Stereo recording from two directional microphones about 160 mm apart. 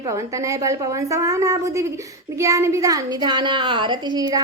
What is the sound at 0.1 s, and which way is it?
A woman's voice, 20° right (ahead or behind).